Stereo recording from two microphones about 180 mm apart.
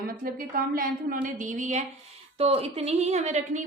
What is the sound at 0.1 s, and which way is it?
A woman's voice, 55° right (ahead or behind).